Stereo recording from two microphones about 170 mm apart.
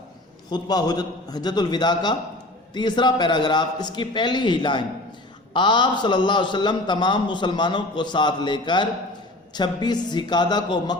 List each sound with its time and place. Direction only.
0.5 s a man's voice: 20° left (ahead or behind)